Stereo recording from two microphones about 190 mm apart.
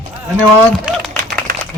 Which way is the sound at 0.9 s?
5° right (ahead or behind).